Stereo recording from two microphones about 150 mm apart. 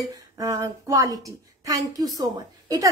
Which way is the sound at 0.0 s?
20° right (ahead or behind).